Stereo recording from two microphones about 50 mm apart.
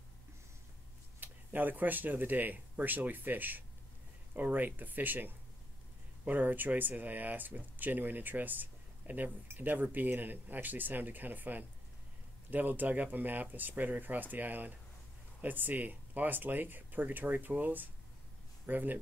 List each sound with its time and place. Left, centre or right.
1.2 s speech: right